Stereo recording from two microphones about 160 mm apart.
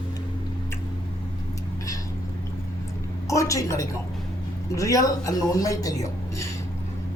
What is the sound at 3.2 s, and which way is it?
Speech, 20° left (ahead or behind).